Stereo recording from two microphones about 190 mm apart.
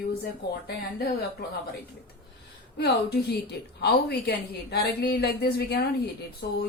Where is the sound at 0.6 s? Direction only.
55° left (ahead or behind).